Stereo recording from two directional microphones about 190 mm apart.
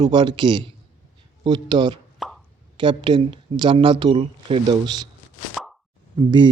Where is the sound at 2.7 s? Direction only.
25° right (ahead or behind).